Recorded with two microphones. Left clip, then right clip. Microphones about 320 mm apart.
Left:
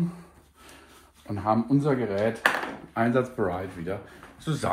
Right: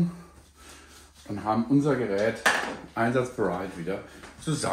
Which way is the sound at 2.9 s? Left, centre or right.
Left.